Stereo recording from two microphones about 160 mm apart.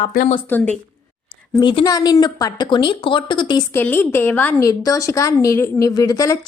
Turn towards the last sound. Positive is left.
turn(degrees=20)  # may be behind; listen again after turning